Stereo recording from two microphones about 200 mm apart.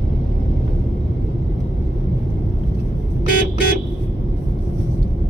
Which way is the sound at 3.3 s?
50° left (ahead or behind).